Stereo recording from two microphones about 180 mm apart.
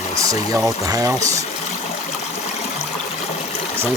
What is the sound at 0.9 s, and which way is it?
Speech, 20° right (ahead or behind).